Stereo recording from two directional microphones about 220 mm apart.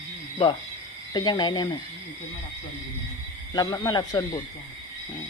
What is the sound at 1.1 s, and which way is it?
Speech, 20° left (ahead or behind).